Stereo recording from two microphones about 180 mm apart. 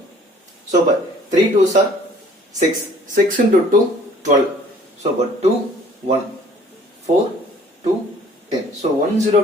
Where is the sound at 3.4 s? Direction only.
65° right (ahead or behind).